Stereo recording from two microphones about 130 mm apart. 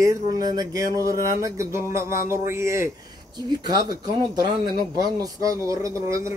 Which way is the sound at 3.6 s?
30° right (ahead or behind).